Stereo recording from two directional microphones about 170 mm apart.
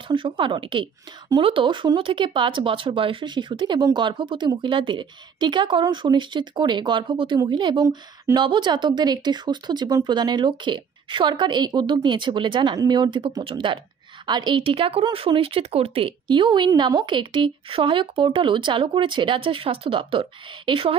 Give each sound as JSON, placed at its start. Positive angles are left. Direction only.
{"t": 0.1, "sound": "speech", "side_deg": -30}